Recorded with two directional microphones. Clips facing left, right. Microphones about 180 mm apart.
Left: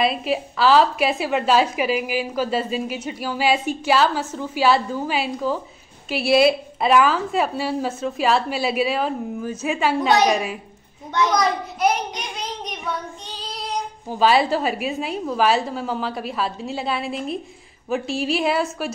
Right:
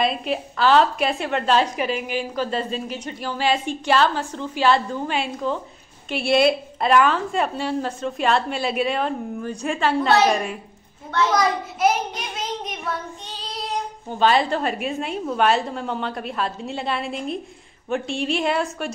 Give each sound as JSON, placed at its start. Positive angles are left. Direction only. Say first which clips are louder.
{"t": 0.0, "sound": "a woman's voice", "louder": "left 2 dB", "side_deg": 5}
{"t": 11.1, "sound": "a woman's voice", "louder": "left 1 dB", "side_deg": 15}
{"t": 11.3, "sound": "a child's voice", "louder": "even", "side_deg": 0}